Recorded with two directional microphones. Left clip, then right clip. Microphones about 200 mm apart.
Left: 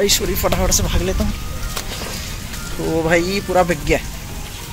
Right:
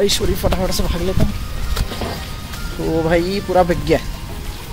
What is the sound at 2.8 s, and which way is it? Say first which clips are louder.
Speech: even; centre (ahead or behind).